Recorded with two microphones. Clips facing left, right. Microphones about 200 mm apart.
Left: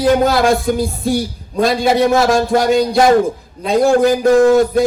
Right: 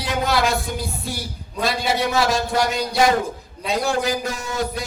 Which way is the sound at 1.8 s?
50° left (ahead or behind).